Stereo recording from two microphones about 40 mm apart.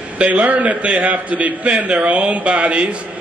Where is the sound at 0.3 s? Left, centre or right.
Right.